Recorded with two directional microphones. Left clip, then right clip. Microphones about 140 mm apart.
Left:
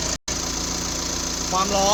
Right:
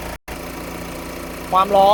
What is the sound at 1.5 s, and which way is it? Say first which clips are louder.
Speech: right 8 dB; 30° right (ahead or behind).